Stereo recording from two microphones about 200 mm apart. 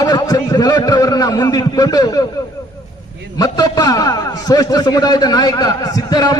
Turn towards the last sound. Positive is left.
turn(degrees=20)  # may be behind; listen again after turning